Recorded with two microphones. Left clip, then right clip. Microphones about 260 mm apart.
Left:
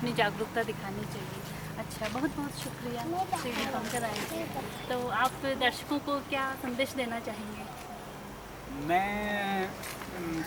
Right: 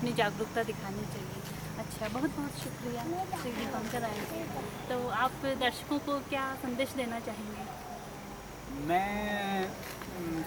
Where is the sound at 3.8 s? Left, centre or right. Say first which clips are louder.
Left 2 dB; centre.